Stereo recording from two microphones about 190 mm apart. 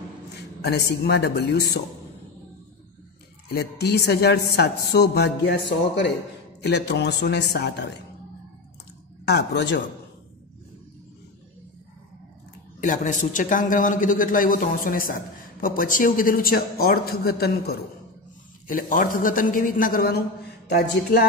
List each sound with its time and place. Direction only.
0.6 s a woman's voice: 60° left (ahead or behind)
3.5 s a woman's voice: 60° left (ahead or behind)
9.2 s a woman's voice: 60° left (ahead or behind)
12.8 s a woman's voice: 40° left (ahead or behind)
20.6 s a woman's voice: 60° left (ahead or behind)